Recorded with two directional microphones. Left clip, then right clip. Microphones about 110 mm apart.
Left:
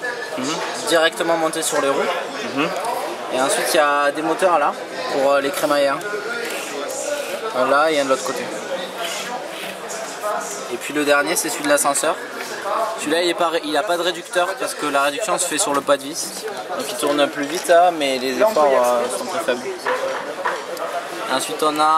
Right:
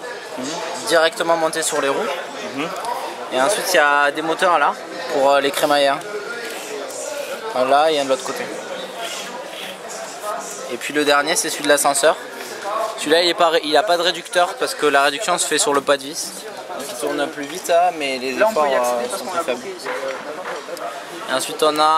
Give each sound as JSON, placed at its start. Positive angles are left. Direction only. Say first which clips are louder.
{"t": 0.8, "sound": "a man's voice", "louder": "right 1 dB", "side_deg": -10}
{"t": 3.3, "sound": "a man's voice", "louder": "right 1 dB", "side_deg": -10}
{"t": 7.5, "sound": "a man's voice", "louder": "right 1 dB", "side_deg": -5}
{"t": 11.0, "sound": "a man's voice", "louder": "right 1 dB", "side_deg": -10}
{"t": 17.8, "sound": "speech", "louder": "left 2 dB", "side_deg": 5}
{"t": 18.4, "sound": "a man's voice", "louder": "left 1 dB", "side_deg": -15}
{"t": 21.3, "sound": "a man's voice", "louder": "right 2 dB", "side_deg": -10}